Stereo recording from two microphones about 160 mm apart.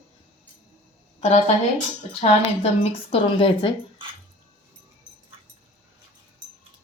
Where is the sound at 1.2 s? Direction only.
45° left (ahead or behind).